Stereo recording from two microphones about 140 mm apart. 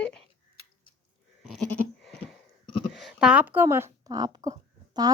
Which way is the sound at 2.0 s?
Centre (ahead or behind).